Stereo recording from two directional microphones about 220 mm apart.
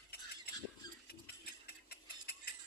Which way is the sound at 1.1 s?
45° left (ahead or behind).